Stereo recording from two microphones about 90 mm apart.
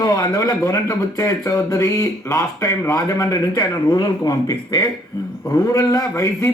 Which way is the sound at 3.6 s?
70° left (ahead or behind).